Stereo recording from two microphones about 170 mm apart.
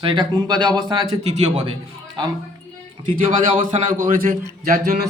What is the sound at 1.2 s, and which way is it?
Speech, 40° right (ahead or behind).